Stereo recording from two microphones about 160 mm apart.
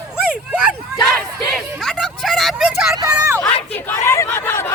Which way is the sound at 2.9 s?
20° right (ahead or behind).